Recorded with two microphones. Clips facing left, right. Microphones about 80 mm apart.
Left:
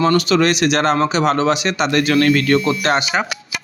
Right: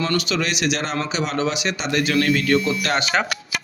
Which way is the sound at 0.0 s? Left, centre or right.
Left.